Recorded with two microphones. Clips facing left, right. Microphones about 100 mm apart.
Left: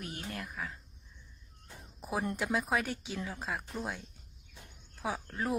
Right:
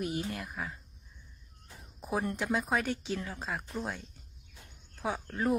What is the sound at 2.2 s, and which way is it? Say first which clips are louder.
Speech: right 1 dB; 5° left (ahead or behind).